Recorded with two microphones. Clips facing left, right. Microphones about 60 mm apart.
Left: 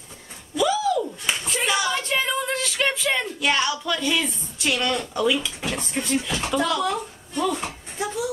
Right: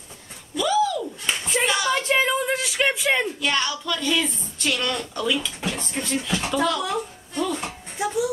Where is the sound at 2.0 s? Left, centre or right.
Centre.